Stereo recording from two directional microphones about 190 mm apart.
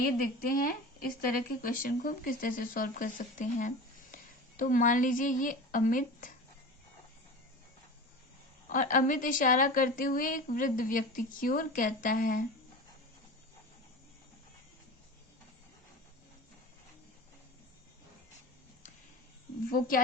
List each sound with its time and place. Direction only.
0.0 s speech: 50° left (ahead or behind)
8.7 s speech: 45° left (ahead or behind)